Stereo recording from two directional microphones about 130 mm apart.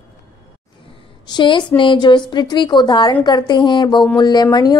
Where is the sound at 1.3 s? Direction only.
35° left (ahead or behind).